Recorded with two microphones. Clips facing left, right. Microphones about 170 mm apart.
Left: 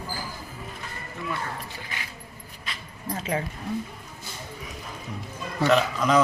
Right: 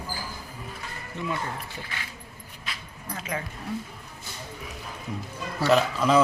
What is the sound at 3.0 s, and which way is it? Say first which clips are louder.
Speech: left 5 dB; 35° left (ahead or behind).